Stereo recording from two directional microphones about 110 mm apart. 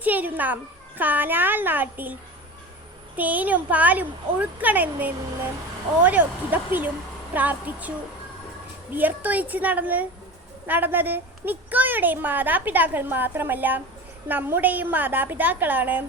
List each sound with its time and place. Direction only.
0.0 s a woman's voice: 15° right (ahead or behind)
3.2 s a woman's voice: 15° right (ahead or behind)
9.0 s a woman's voice: 15° right (ahead or behind)